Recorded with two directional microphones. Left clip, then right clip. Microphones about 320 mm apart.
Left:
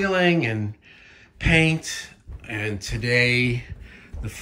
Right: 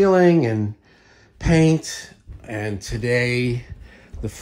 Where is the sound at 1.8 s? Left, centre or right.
Centre.